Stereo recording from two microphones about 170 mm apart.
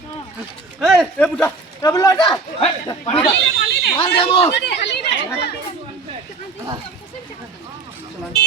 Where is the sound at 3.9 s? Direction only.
30° left (ahead or behind).